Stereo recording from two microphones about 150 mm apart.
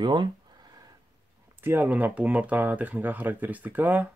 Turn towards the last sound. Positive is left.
turn(degrees=-10)  # may be behind; listen again after turning